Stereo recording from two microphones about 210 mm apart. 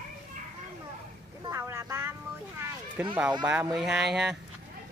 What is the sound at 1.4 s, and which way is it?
Vehicle, 15° right (ahead or behind).